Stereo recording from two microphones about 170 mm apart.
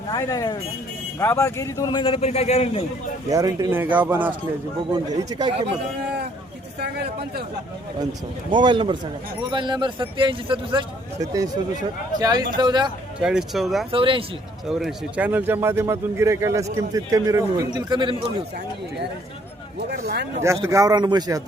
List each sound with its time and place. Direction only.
0.1 s speech: 20° left (ahead or behind); by 2.8 s 40° left (ahead or behind)
3.2 s a man's voice: 20° right (ahead or behind)
4.9 s a man's voice: 25° right (ahead or behind)
6.7 s speech: 75° right (ahead or behind)
8.5 s a man's voice: 30° right (ahead or behind)
13.2 s speech: 5° right (ahead or behind)
13.9 s speech: 30° right (ahead or behind)
14.7 s a man's voice: centre (ahead or behind); by 18.4 s 30° right (ahead or behind)
19.9 s speech: 75° right (ahead or behind)
20.4 s a man's voice: 15° right (ahead or behind)